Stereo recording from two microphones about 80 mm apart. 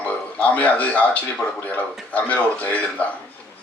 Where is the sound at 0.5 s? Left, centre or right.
Centre.